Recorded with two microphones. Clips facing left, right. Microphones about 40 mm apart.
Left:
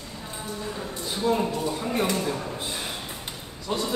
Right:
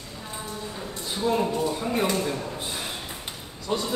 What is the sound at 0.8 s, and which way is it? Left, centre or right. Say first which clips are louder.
A man's voice: right 1 dB; centre.